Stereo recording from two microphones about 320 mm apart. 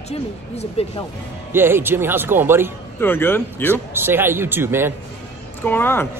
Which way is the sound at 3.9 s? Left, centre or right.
Centre.